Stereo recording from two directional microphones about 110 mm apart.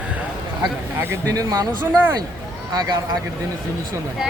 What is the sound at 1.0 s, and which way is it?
Speech, 25° right (ahead or behind).